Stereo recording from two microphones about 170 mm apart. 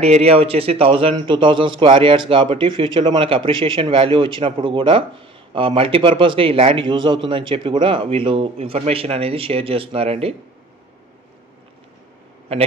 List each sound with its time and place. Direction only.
0.0 s a man's voice: 35° right (ahead or behind)